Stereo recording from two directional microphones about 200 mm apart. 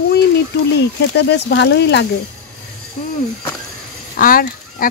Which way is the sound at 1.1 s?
60° left (ahead or behind).